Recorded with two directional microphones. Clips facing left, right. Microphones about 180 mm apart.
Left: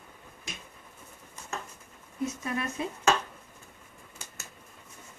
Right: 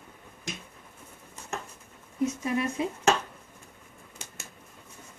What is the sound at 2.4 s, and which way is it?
Speech, 15° right (ahead or behind).